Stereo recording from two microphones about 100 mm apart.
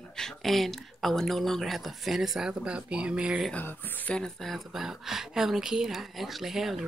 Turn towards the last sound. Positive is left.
turn(degrees=-5)  # may be behind; listen again after turning